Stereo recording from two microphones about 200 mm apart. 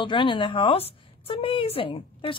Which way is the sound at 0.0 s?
25° left (ahead or behind).